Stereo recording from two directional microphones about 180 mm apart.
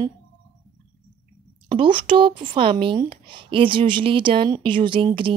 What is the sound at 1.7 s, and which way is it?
Speech, 25° right (ahead or behind).